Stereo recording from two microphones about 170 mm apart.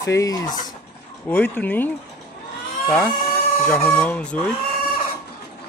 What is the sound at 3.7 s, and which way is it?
Speech, 10° left (ahead or behind).